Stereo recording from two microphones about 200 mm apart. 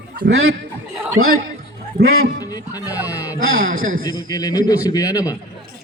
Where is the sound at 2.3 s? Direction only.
20° left (ahead or behind).